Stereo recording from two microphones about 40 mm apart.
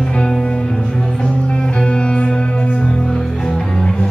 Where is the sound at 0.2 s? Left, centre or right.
Centre.